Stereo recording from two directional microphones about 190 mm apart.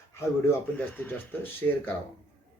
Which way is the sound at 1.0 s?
10° left (ahead or behind).